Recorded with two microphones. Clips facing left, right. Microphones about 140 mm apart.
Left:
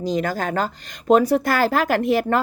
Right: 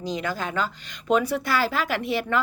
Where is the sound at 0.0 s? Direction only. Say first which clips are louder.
Left 6 dB; 40° left (ahead or behind).